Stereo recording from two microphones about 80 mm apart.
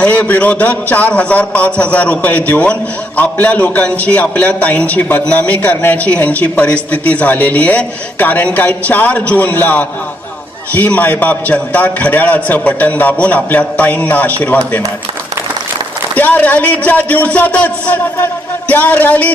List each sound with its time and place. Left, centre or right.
0.0 s a man's voice: centre
16.1 s a man's voice: left